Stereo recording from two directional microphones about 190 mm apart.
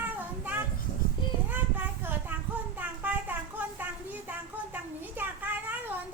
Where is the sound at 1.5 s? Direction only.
10° right (ahead or behind).